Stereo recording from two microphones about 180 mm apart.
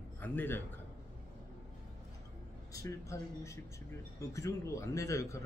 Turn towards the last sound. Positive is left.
turn(degrees=15)  # may be behind; listen again after turning